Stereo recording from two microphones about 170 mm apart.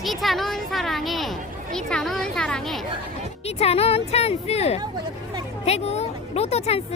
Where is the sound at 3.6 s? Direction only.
35° left (ahead or behind).